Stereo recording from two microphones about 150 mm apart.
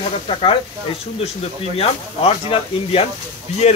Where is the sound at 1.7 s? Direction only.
40° left (ahead or behind).